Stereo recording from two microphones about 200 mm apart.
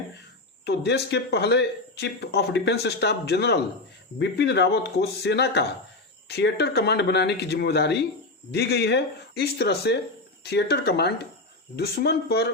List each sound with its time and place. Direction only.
0.6 s speech: 55° left (ahead or behind)